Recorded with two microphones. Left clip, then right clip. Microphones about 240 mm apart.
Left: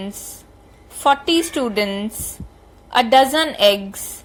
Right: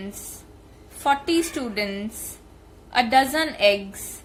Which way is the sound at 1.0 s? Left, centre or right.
Centre.